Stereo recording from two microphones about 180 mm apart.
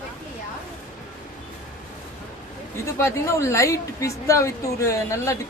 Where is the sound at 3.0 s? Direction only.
15° left (ahead or behind).